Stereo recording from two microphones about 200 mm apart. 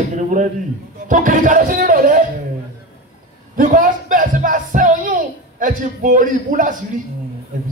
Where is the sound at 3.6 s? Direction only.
40° right (ahead or behind).